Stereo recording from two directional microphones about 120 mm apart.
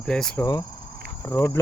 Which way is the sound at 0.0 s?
5° left (ahead or behind).